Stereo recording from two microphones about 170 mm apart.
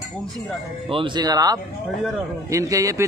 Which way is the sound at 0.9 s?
25° right (ahead or behind).